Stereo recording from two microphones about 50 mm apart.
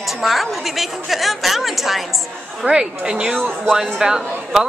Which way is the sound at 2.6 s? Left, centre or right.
Centre.